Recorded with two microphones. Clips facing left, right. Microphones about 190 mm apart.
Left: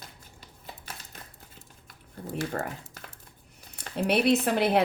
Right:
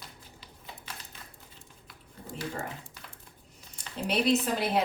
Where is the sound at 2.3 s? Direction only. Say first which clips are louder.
Left 5 dB; 50° left (ahead or behind).